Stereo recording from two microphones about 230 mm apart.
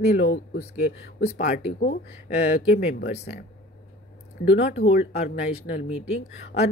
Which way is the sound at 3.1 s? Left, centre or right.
Left.